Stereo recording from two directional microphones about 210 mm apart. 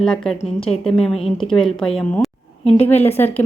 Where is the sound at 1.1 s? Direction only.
30° left (ahead or behind).